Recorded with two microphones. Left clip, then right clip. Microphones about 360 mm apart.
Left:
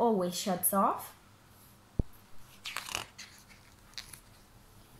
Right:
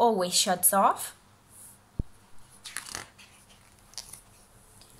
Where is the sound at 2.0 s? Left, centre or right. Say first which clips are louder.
Left 3 dB; left.